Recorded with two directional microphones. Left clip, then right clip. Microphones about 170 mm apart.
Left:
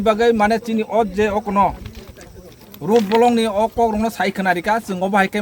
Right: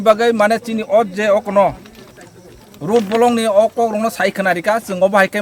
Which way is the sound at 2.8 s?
20° right (ahead or behind).